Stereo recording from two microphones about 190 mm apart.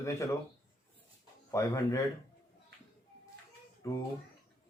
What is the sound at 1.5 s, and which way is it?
Speech, 15° left (ahead or behind).